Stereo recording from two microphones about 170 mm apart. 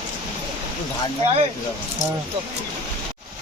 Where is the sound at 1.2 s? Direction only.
35° right (ahead or behind).